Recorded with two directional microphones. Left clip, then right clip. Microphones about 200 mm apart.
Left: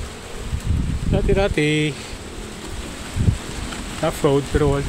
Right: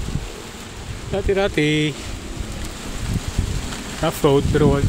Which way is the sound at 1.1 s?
Centre (ahead or behind).